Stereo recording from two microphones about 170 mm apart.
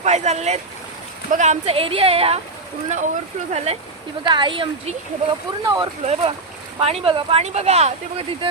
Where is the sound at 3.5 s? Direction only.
40° right (ahead or behind).